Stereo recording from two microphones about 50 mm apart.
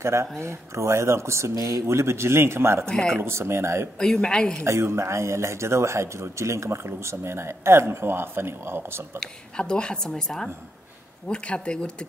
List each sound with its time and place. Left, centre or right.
0.0 s speech: right
2.9 s a woman's voice: centre
3.2 s a man's voice: right
4.0 s a woman's voice: centre
4.6 s a man's voice: right
9.2 s a woman's voice: centre